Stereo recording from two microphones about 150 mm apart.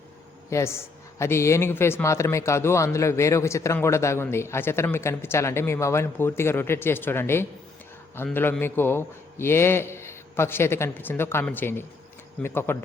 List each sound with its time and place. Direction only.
0.5 s a woman's voice: 20° left (ahead or behind)